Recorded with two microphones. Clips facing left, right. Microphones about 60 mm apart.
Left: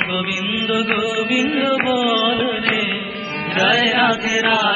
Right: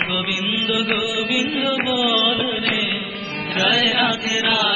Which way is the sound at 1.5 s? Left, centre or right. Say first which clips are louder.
Left 4 dB; left.